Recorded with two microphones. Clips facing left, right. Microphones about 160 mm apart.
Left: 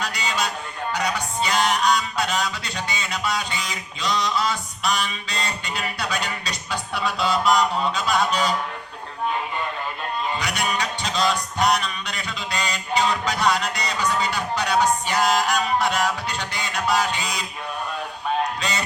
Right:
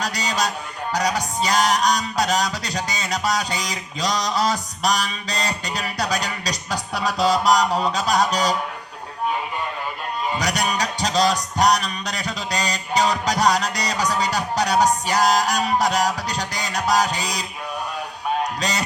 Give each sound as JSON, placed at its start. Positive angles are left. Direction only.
{"t": 0.0, "sound": "a sound", "side_deg": -40}
{"t": 0.9, "sound": "music", "side_deg": -40}
{"t": 10.3, "sound": "music", "side_deg": -40}
{"t": 18.6, "sound": "music", "side_deg": -40}